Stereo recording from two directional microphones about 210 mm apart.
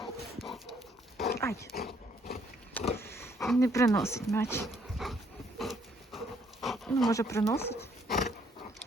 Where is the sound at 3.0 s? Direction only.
10° left (ahead or behind).